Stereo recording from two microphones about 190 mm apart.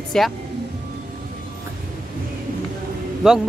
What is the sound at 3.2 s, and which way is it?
Speech, 5° right (ahead or behind).